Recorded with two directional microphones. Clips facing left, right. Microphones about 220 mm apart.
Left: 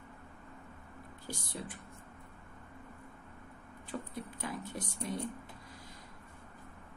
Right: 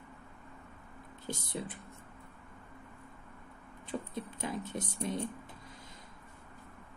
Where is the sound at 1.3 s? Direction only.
20° right (ahead or behind).